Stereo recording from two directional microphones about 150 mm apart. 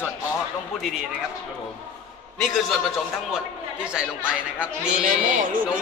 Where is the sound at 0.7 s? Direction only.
Centre (ahead or behind).